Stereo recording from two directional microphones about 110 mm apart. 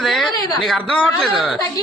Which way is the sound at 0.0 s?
Centre (ahead or behind).